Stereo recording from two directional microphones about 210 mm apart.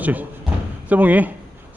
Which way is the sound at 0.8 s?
10° right (ahead or behind).